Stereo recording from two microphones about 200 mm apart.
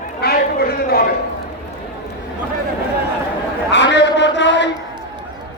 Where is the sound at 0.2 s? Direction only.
50° left (ahead or behind).